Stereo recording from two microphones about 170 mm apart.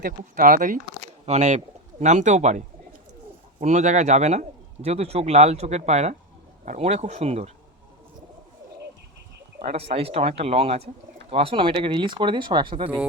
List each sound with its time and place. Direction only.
0.0 s speech: 55° right (ahead or behind)
1.2 s a man's voice: 40° right (ahead or behind)
9.6 s a man's voice: 35° right (ahead or behind)